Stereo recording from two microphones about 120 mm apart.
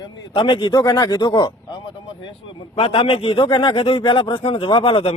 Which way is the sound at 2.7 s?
50° left (ahead or behind).